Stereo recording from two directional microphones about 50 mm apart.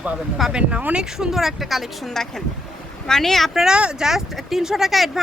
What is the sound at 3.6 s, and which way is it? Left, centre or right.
Speech, centre.